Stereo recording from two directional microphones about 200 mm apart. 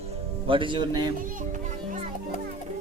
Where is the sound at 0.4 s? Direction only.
25° right (ahead or behind).